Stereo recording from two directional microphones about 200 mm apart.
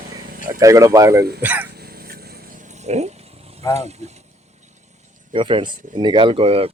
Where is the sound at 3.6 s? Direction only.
15° left (ahead or behind).